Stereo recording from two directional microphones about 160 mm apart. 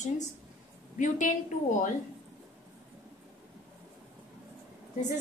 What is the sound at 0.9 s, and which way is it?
Speech, 50° left (ahead or behind).